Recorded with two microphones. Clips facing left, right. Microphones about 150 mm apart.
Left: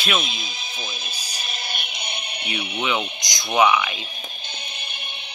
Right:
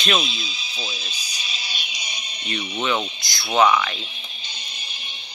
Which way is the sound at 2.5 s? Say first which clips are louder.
Right 1 dB; 10° left (ahead or behind).